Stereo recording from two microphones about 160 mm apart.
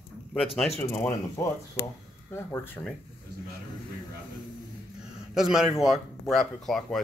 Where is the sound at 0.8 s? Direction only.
10° left (ahead or behind).